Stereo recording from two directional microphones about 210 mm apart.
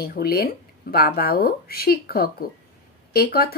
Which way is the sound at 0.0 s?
45° left (ahead or behind).